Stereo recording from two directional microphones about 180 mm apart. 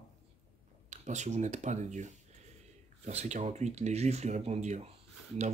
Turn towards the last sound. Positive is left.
turn(degrees=-35)  # may be behind; listen again after turning